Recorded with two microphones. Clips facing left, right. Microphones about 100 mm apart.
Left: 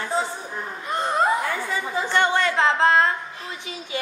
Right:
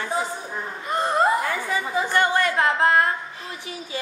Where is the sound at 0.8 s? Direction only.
Centre (ahead or behind).